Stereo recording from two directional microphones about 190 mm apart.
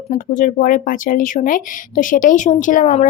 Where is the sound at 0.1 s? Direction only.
45° left (ahead or behind).